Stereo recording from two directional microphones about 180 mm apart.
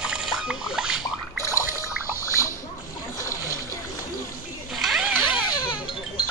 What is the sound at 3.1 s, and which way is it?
Boat, 15° left (ahead or behind).